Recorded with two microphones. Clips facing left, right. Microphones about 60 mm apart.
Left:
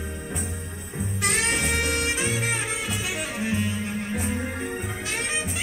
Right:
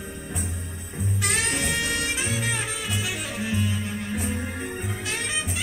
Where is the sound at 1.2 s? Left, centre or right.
Left.